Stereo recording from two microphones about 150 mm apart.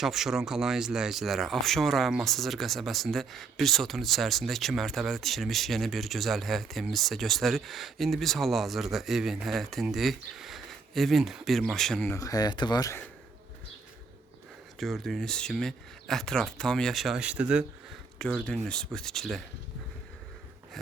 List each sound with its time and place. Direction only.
0.0 s speech: centre (ahead or behind)
12.0 s speech: 20° left (ahead or behind)
14.8 s speech: centre (ahead or behind)
18.4 s speech: 5° left (ahead or behind)